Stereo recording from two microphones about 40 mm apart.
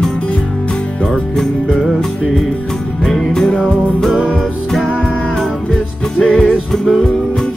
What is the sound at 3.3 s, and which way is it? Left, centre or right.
Music, centre.